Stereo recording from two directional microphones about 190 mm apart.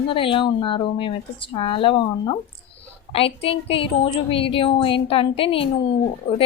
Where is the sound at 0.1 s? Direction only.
25° left (ahead or behind).